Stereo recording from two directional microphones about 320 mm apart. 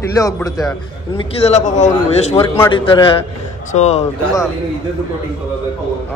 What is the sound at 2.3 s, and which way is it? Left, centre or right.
A man's voice, centre.